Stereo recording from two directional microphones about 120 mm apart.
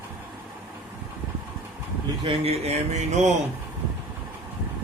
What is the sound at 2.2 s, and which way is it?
Speech, 60° right (ahead or behind).